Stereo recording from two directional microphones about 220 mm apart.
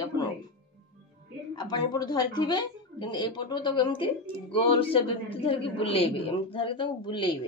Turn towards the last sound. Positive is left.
turn(degrees=25)  # may be behind; listen again after turning